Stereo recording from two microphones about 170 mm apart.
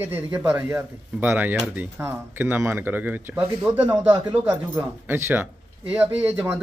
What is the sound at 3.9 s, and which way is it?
A man's voice, 20° right (ahead or behind).